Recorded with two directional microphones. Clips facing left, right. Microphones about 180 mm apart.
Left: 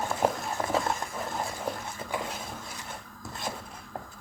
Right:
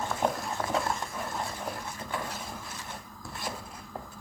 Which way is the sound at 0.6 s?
10° left (ahead or behind).